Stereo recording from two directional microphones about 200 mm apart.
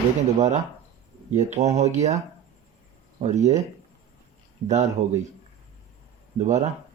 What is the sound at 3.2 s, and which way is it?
Speech, 35° right (ahead or behind).